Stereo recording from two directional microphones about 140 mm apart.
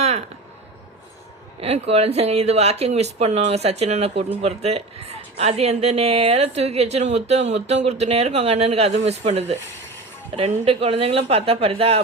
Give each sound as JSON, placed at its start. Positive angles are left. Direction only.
{"t": 1.6, "sound": "a man's voice", "side_deg": -45}